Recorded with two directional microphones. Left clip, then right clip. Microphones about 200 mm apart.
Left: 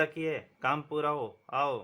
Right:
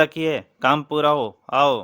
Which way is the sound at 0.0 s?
55° right (ahead or behind).